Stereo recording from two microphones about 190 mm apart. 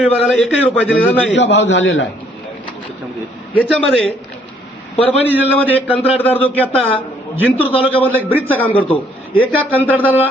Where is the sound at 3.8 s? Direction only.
5° left (ahead or behind).